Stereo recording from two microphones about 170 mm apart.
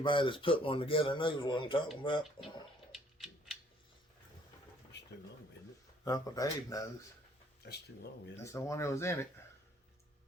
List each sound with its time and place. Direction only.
0.0 s speech: 30° left (ahead or behind)
2.9 s a sound: centre (ahead or behind)
4.9 s a sound: 85° left
6.1 s speech: 20° left (ahead or behind)
7.6 s speech: 75° left (ahead or behind)
8.5 s speech: 15° left (ahead or behind)